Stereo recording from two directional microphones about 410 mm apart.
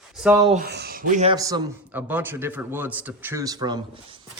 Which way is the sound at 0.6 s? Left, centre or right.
Right.